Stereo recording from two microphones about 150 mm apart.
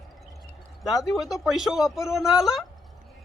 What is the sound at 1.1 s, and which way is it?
Speech, centre (ahead or behind).